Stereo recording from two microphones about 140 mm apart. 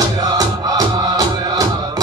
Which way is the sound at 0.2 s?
25° right (ahead or behind).